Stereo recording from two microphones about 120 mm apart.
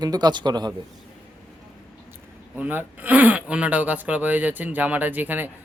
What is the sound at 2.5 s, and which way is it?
Speech, 15° right (ahead or behind).